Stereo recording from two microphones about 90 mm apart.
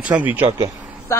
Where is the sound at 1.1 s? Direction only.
35° left (ahead or behind).